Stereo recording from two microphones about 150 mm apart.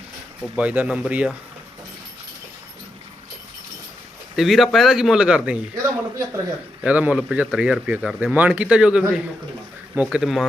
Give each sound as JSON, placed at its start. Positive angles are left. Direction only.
{"t": 0.5, "sound": "speech", "side_deg": -10}
{"t": 4.4, "sound": "speech", "side_deg": 0}
{"t": 5.7, "sound": "speech", "side_deg": -20}
{"t": 6.8, "sound": "speech", "side_deg": -10}